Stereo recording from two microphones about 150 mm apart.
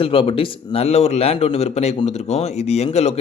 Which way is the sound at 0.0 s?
40° left (ahead or behind).